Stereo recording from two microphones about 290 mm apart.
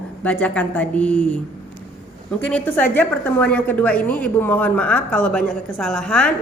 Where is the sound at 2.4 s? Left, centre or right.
Centre.